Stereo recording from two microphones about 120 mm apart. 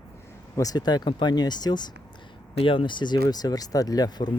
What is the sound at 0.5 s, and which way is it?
Speech, 30° left (ahead or behind).